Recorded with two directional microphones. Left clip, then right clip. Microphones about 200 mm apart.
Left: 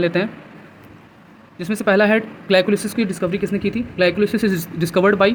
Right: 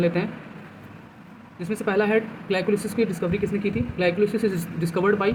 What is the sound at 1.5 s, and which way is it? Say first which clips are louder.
Speech: left 7 dB; 50° left (ahead or behind).